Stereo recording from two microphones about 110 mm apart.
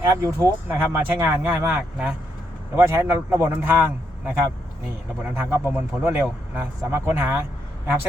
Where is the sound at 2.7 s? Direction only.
25° right (ahead or behind).